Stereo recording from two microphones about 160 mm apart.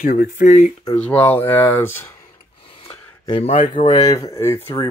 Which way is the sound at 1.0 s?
10° left (ahead or behind).